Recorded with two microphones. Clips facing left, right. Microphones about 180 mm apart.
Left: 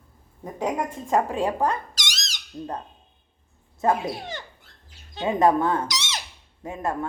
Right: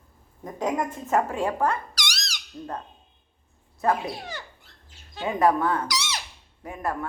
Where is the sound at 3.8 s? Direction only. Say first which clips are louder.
Left 2 dB; 25° left (ahead or behind).